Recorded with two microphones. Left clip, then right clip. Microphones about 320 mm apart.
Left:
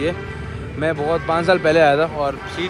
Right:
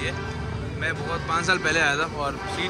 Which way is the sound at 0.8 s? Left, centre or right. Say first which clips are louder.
Left 9 dB; centre.